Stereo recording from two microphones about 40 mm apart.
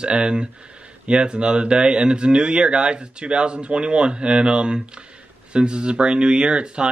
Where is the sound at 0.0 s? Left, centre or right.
Right.